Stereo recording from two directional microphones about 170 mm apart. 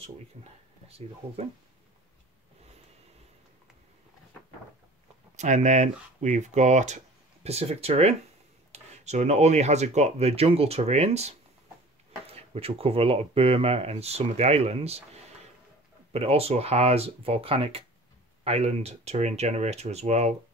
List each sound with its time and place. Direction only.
0.0 s speech: 35° right (ahead or behind)
5.3 s speech: 45° right (ahead or behind)
16.1 s speech: 35° right (ahead or behind)